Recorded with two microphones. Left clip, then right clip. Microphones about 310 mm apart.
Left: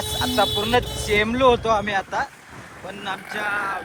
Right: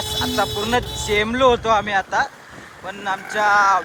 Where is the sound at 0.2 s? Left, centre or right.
Centre.